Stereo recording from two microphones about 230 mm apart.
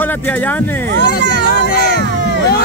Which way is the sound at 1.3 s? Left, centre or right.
Left.